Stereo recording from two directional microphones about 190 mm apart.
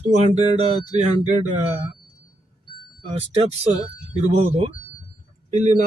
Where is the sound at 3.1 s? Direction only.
35° right (ahead or behind).